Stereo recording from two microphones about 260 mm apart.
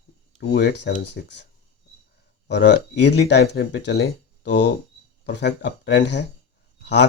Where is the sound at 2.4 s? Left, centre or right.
Left.